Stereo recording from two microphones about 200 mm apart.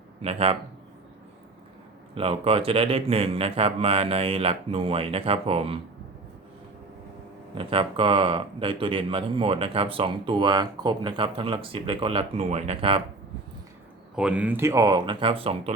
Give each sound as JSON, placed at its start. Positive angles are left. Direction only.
{"t": 0.2, "sound": "a man's voice", "side_deg": -30}
{"t": 2.1, "sound": "speech", "side_deg": -30}
{"t": 7.5, "sound": "speech", "side_deg": -25}
{"t": 14.2, "sound": "speech", "side_deg": -5}